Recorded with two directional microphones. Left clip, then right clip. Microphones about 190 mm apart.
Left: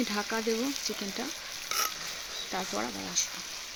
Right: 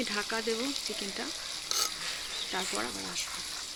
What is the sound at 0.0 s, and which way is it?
Speech, 60° left (ahead or behind).